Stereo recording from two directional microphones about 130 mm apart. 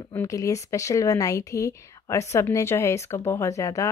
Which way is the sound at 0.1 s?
25° left (ahead or behind).